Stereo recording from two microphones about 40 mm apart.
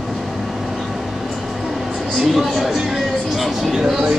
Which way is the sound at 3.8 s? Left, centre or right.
Centre.